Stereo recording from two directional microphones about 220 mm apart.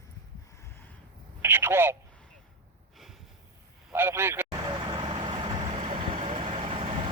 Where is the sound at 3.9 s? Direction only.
10° right (ahead or behind).